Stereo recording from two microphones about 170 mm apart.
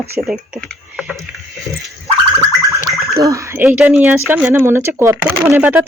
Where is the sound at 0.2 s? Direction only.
10° right (ahead or behind).